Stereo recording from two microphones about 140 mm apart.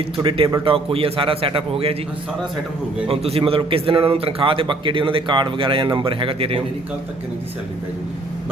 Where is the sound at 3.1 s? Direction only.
45° right (ahead or behind).